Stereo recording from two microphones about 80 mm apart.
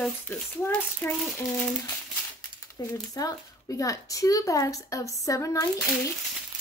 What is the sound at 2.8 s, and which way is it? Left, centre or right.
Speech, left.